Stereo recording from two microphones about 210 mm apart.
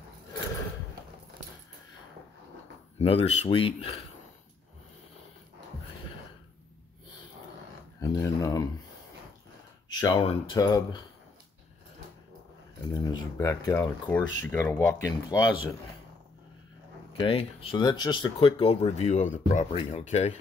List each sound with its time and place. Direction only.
3.0 s speech: 30° left (ahead or behind)
8.0 s speech: 15° left (ahead or behind)
9.8 s speech: 20° left (ahead or behind)
12.9 s speech: 20° left (ahead or behind)
17.2 s speech: 25° left (ahead or behind)